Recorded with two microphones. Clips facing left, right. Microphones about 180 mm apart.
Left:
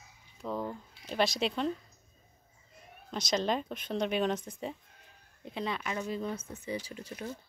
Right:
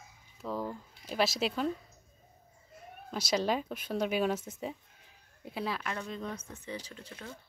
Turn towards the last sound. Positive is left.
turn(degrees=15)  # may be behind; listen again after turning